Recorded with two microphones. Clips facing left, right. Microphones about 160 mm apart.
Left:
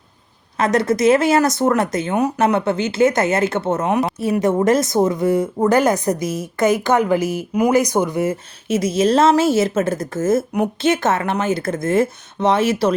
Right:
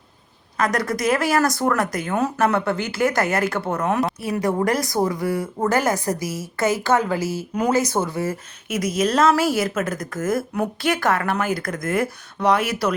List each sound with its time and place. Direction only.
0.5 s a woman's voice: 25° left (ahead or behind)